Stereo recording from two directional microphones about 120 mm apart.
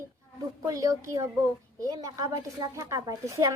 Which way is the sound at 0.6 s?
30° right (ahead or behind).